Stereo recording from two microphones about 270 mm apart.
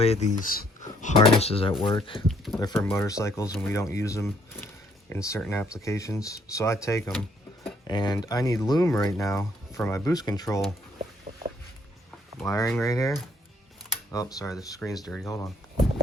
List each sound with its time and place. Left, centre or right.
0.0 s speech: left
2.2 s a sound: centre
2.6 s speech: centre
12.4 s speech: centre